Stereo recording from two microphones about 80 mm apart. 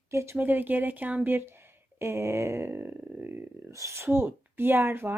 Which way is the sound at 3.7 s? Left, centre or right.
Right.